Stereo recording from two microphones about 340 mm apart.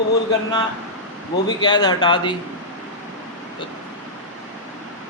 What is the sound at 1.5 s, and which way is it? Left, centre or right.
Speech, centre.